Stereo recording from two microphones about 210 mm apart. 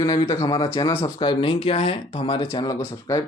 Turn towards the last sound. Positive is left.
turn(degrees=15)  # may be behind; listen again after turning